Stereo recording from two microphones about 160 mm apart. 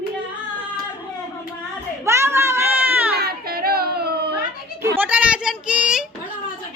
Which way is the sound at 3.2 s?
70° right (ahead or behind).